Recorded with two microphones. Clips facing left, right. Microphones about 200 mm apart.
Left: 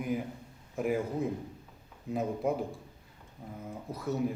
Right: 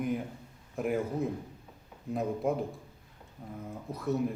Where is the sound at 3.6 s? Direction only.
Centre (ahead or behind).